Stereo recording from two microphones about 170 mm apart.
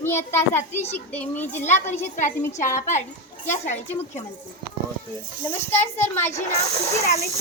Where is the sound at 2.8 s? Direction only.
45° left (ahead or behind).